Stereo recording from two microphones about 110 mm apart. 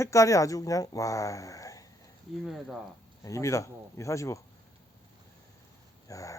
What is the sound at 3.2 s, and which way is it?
Speech, 30° left (ahead or behind).